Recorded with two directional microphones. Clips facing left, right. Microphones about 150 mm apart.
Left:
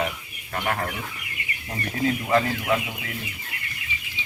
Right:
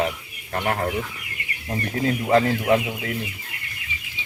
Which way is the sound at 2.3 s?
30° right (ahead or behind).